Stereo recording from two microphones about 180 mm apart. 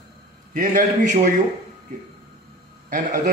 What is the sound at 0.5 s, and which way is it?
Speech, 45° right (ahead or behind).